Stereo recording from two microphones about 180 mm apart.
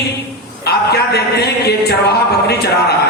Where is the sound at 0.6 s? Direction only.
65° left (ahead or behind).